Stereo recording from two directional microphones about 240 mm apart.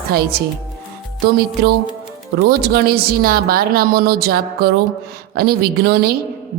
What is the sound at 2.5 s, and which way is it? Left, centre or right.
A woman's voice, right.